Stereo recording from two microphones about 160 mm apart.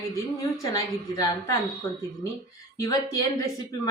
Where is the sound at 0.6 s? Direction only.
25° left (ahead or behind).